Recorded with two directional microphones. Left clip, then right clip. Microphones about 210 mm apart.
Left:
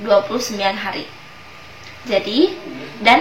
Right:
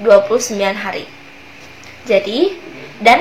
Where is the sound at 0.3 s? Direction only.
40° right (ahead or behind).